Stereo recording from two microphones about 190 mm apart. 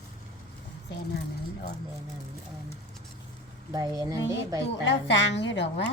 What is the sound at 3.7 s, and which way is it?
Speech, 20° right (ahead or behind).